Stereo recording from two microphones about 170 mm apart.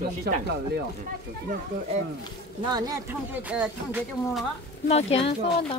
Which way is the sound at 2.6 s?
25° right (ahead or behind).